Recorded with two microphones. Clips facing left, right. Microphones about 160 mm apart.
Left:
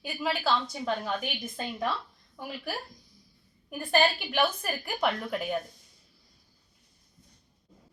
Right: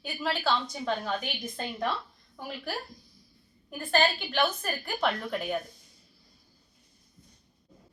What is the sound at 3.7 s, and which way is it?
A woman's voice, 15° left (ahead or behind).